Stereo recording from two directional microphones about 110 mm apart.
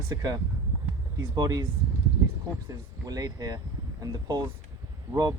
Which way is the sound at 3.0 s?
35° right (ahead or behind).